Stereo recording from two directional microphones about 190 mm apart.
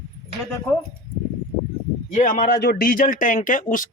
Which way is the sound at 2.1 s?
45° left (ahead or behind).